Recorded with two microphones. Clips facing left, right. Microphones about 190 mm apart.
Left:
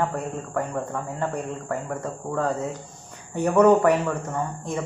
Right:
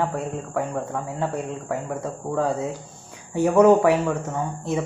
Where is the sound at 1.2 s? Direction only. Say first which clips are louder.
Right 1 dB; 5° right (ahead or behind).